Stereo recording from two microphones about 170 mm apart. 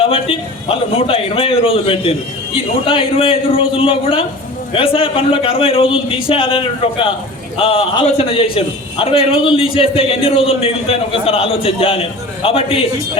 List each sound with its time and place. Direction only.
0.0 s a man's voice: 35° left (ahead or behind)